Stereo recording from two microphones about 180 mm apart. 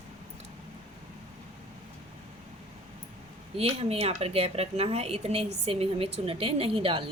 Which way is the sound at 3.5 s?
35° right (ahead or behind).